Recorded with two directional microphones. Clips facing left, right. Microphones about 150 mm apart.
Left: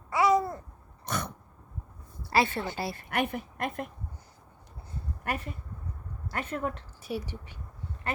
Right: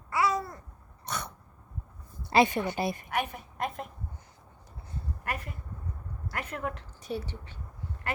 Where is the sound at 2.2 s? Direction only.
20° right (ahead or behind).